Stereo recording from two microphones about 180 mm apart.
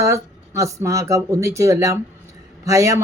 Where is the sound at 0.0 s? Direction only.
15° right (ahead or behind).